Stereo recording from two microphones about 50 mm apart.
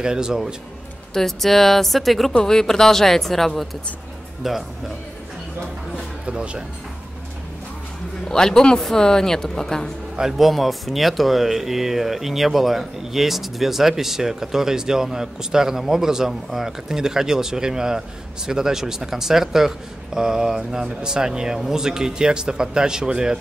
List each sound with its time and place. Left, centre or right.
0.0 s speech: centre
1.1 s a woman's voice: centre
6.2 s speech: right
8.3 s a woman's voice: centre
10.1 s speech: centre